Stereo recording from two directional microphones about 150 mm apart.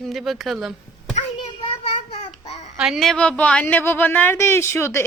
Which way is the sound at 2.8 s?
Centre (ahead or behind).